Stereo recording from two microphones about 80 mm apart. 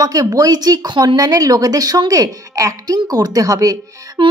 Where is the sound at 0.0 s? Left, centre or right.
Right.